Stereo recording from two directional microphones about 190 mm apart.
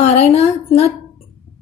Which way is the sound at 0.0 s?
35° left (ahead or behind).